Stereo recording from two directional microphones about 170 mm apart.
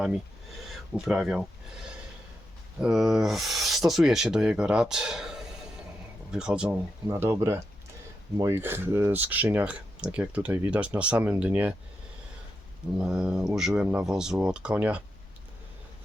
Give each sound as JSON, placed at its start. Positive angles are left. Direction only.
{"t": 0.7, "sound": "speech", "side_deg": -5}
{"t": 2.8, "sound": "speech", "side_deg": -5}
{"t": 13.0, "sound": "speech", "side_deg": -5}